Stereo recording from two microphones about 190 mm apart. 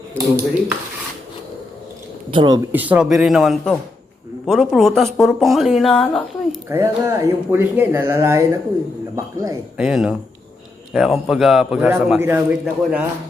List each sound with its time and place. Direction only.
0.1 s speech: 10° left (ahead or behind)
2.3 s speech: 25° right (ahead or behind)
2.7 s speech: 10° right (ahead or behind)
6.7 s speech: 15° right (ahead or behind)
9.7 s speech: 5° right (ahead or behind)